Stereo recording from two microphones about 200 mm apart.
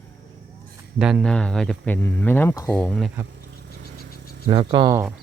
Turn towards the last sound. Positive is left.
turn(degrees=-20)  # may be behind; listen again after turning